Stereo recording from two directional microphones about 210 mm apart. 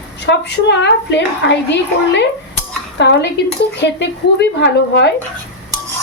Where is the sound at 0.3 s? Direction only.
55° left (ahead or behind).